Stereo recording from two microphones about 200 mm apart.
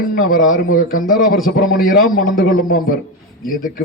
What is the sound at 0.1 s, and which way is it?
A man's voice, 45° left (ahead or behind).